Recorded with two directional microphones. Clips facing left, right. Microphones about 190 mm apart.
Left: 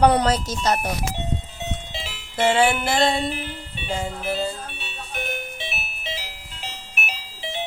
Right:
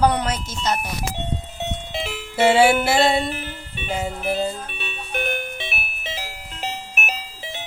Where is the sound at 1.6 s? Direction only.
55° right (ahead or behind).